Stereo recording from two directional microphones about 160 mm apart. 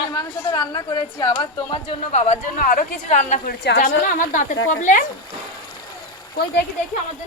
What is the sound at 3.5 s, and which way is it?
Speech, 65° left (ahead or behind).